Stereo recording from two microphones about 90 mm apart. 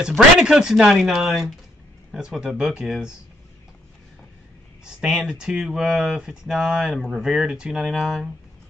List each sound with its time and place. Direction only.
0.4 s speech: 5° right (ahead or behind)
4.8 s speech: 5° right (ahead or behind)